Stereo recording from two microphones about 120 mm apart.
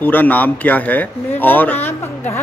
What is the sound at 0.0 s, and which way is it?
A man's voice, 15° left (ahead or behind).